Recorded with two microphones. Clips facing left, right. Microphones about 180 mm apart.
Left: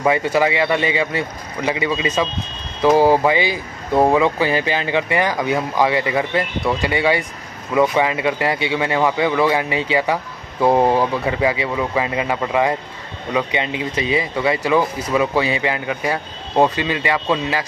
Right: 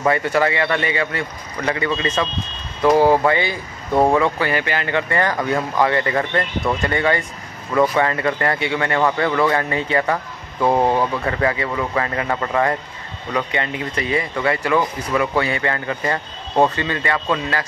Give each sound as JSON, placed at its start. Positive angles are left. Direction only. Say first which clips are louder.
{"t": 0.0, "sound": "speech", "louder": "left 1 dB", "side_deg": 15}